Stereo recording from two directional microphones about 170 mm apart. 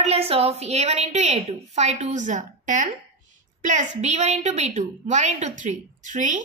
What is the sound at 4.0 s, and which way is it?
A woman's voice, 40° right (ahead or behind).